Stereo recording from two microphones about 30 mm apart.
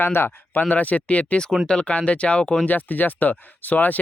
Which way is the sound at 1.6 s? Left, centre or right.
Left.